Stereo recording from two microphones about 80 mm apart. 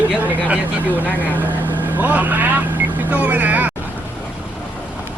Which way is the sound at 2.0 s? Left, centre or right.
Right.